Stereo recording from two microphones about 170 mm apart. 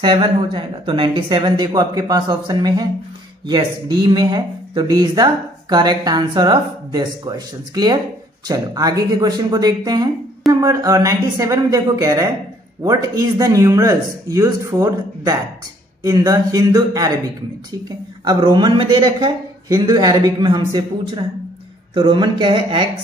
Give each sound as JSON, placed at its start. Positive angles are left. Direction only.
{"t": 0.0, "sound": "speech", "side_deg": -30}